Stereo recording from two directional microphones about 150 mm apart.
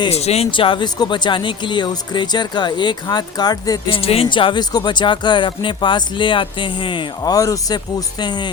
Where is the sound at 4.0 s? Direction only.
40° left (ahead or behind).